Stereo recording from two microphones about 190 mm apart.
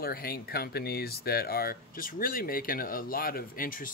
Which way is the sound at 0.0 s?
50° left (ahead or behind).